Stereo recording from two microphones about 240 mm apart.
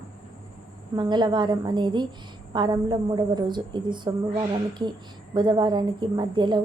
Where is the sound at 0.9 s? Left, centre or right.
Centre.